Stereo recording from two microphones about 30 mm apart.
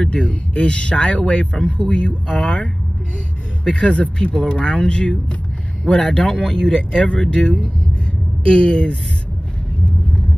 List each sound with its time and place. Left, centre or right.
0.1 s speech: left